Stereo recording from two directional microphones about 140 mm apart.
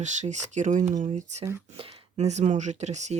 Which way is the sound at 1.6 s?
45° right (ahead or behind).